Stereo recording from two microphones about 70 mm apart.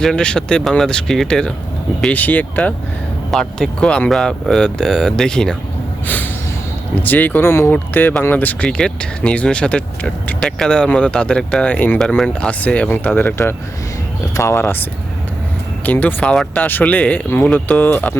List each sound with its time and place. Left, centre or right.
0.0 s speech: centre
2.1 s speech: left
3.3 s speech: centre
7.0 s speech: left
7.4 s speech: left
8.6 s speech: centre
11.9 s speech: centre
12.3 s speech: centre
14.3 s speech: left
15.9 s speech: left
17.7 s speech: left